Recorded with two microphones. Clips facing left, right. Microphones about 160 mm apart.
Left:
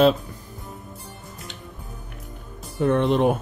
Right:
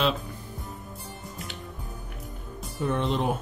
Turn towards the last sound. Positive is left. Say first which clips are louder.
# left 7 dB
turn(degrees=60)  # may be behind; listen again after turning